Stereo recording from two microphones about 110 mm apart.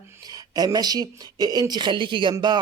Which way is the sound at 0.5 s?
35° right (ahead or behind).